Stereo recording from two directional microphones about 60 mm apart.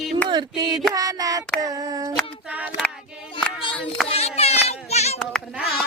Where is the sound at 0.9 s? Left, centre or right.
Right.